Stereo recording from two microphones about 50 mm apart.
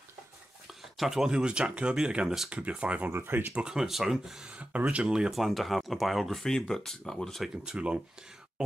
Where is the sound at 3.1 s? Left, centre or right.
Right.